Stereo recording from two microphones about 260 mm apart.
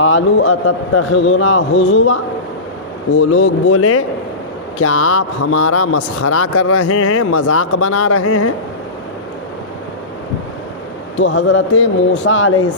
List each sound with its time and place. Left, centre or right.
0.0 s speech: left
11.2 s speech: left